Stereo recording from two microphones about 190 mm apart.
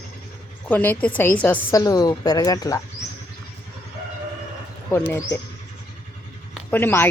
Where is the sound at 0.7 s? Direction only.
10° left (ahead or behind).